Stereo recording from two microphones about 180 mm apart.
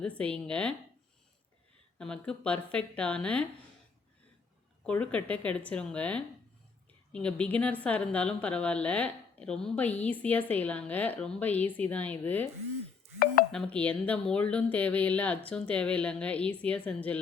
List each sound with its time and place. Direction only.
0.0 s speech: 5° left (ahead or behind)
2.0 s a woman's voice: 5° left (ahead or behind)
4.9 s a woman's voice: 5° left (ahead or behind)
13.5 s a woman's voice: 5° left (ahead or behind)